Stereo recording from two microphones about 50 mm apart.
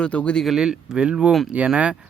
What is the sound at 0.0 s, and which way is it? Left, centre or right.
Speech, left.